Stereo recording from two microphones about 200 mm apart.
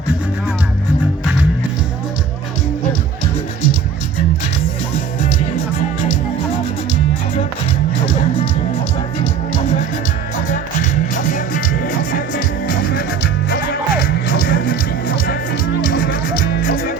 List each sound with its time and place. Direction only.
11.1 s music: 40° left (ahead or behind)